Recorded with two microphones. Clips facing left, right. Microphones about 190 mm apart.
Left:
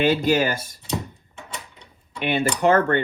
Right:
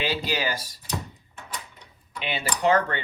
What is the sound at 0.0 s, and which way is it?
Cutlery, 50° left (ahead or behind).